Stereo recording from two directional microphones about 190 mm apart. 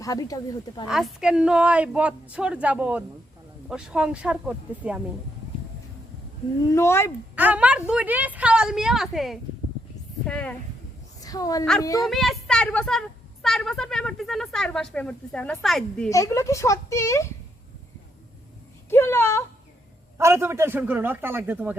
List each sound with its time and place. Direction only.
0.0 s speech: 20° left (ahead or behind)
0.9 s a woman's voice: centre (ahead or behind)
6.7 s speech: 15° left (ahead or behind)
7.3 s a woman's voice: 10° right (ahead or behind)
11.2 s a woman's voice: 20° left (ahead or behind)
12.0 s a woman's voice: centre (ahead or behind)
16.0 s speech: 15° left (ahead or behind)
18.9 s speech: 10° left (ahead or behind)
20.1 s a woman's voice: 15° right (ahead or behind)